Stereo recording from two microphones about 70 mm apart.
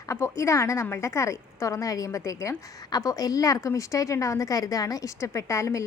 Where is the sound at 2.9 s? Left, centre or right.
Left.